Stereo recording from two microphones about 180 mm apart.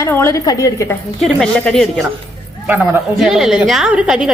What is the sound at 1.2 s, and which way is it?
Speech, centre (ahead or behind).